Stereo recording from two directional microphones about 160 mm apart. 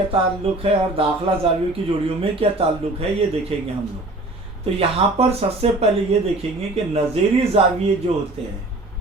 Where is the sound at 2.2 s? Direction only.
35° right (ahead or behind).